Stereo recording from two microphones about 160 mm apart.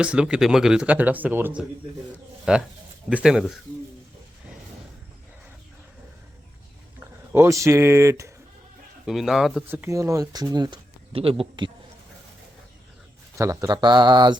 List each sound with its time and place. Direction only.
0.0 s speech: 5° right (ahead or behind)
7.3 s speech: 20° right (ahead or behind)
9.0 s speech: centre (ahead or behind)
9.6 s speech: 15° right (ahead or behind); by 11.7 s 30° right (ahead or behind)
13.3 s speech: 20° right (ahead or behind)